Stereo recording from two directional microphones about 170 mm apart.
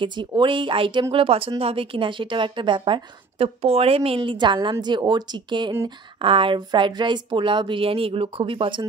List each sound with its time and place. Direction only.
0.0 s a woman's voice: 30° right (ahead or behind)